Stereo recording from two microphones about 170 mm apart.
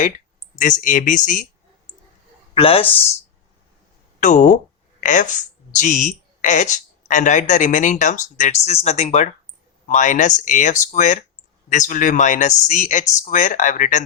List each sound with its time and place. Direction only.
0.5 s speech: 50° left (ahead or behind)
2.6 s speech: 35° left (ahead or behind)
4.2 s speech: 45° left (ahead or behind)